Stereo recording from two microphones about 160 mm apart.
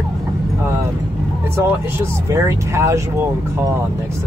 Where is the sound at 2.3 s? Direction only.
20° right (ahead or behind).